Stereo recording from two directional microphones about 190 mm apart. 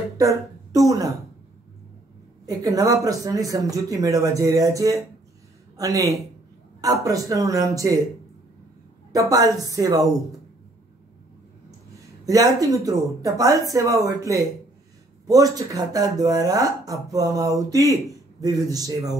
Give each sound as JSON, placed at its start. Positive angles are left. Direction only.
{"t": 0.2, "sound": "a woman's voice", "side_deg": -15}
{"t": 2.4, "sound": "speech", "side_deg": -20}
{"t": 9.1, "sound": "speech", "side_deg": -20}
{"t": 12.3, "sound": "speech", "side_deg": -20}